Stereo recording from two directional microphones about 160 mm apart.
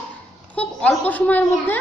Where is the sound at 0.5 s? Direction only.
10° left (ahead or behind).